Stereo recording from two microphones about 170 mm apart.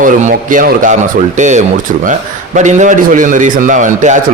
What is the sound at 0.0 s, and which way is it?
A man's voice, 50° right (ahead or behind).